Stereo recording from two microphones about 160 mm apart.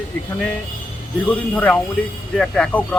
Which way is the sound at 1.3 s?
10° left (ahead or behind).